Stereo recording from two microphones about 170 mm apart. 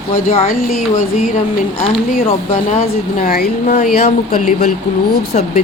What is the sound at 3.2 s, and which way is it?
Speech, 60° left (ahead or behind).